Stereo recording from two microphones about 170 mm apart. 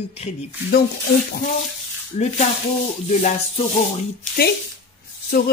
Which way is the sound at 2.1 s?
45° left (ahead or behind).